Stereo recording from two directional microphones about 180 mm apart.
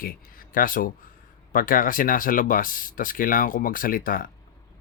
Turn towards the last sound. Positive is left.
turn(degrees=50)  # may be behind; listen again after turning